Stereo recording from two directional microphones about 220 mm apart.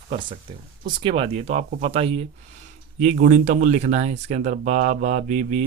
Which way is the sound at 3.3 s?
35° right (ahead or behind).